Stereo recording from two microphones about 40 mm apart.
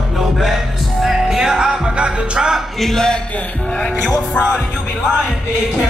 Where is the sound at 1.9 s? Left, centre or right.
Right.